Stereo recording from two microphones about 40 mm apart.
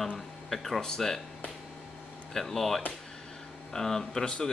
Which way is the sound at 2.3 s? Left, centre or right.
Centre.